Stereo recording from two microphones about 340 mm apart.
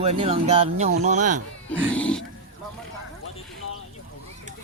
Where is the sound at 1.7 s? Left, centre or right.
Centre.